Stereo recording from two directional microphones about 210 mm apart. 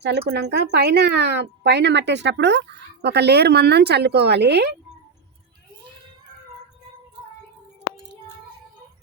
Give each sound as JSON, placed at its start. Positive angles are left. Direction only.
{"t": 0.0, "sound": "speech", "side_deg": -55}